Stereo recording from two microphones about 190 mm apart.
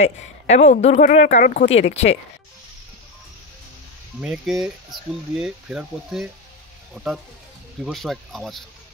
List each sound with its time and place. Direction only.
0.0 s speech: 35° left (ahead or behind)
1.7 s speech: 35° left (ahead or behind)
4.2 s speech: centre (ahead or behind)
7.8 s speech: centre (ahead or behind)